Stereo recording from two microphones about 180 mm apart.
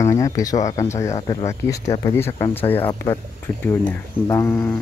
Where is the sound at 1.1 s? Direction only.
35° left (ahead or behind).